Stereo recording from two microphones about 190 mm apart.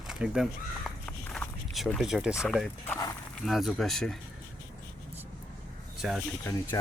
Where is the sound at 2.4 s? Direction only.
Centre (ahead or behind).